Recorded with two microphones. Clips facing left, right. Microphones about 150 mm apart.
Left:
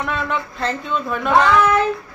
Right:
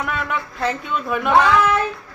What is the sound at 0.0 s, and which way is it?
Speech, 5° right (ahead or behind).